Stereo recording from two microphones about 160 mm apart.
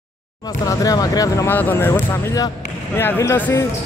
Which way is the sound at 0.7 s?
25° left (ahead or behind).